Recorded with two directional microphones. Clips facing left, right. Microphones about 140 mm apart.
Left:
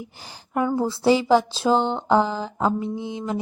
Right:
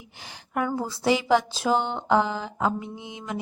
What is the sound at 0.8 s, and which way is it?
A woman's voice, 30° left (ahead or behind).